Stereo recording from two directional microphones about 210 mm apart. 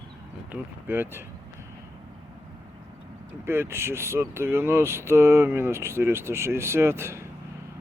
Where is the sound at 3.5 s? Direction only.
10° right (ahead or behind).